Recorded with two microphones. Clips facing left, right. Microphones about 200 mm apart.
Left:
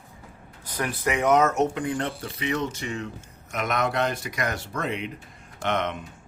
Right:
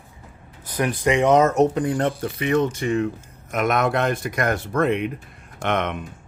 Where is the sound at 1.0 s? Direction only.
30° right (ahead or behind).